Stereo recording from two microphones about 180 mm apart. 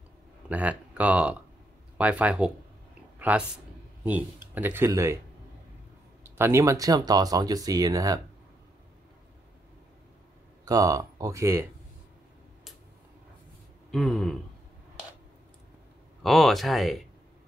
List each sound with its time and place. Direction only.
0.5 s speech: 10° right (ahead or behind)
3.2 s a sound: 5° right (ahead or behind)
4.6 s speech: 10° right (ahead or behind)
6.3 s speech: 15° right (ahead or behind)
10.6 s speech: 20° right (ahead or behind)
13.9 s speech: centre (ahead or behind)
16.2 s speech: centre (ahead or behind)